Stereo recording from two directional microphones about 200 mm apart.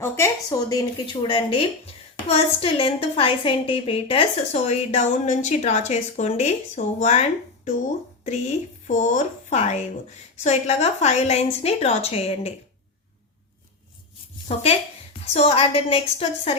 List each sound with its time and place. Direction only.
0.0 s a woman's voice: 15° left (ahead or behind); by 12.5 s 30° left (ahead or behind)
14.4 s a woman's voice: 30° left (ahead or behind)